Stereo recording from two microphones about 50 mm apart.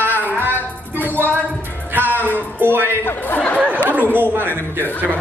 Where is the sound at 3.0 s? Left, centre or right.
Left.